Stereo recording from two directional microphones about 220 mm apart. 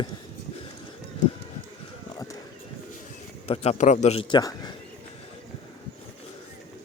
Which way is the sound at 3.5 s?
30° left (ahead or behind).